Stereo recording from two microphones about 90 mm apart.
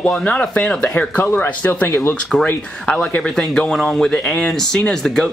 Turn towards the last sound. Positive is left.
turn(degrees=10)  # may be behind; listen again after turning